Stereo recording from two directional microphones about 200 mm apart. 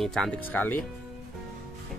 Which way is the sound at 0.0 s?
Centre (ahead or behind).